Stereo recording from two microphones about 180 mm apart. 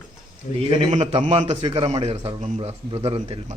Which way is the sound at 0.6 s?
35° right (ahead or behind).